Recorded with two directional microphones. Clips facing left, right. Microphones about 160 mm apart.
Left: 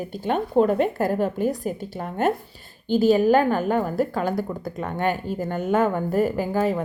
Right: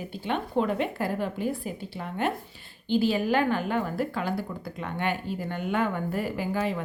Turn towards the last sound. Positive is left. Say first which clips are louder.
# left 6 dB
turn(degrees=45)  # may be behind; listen again after turning